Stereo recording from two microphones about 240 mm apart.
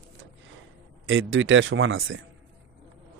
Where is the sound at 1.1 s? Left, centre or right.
Right.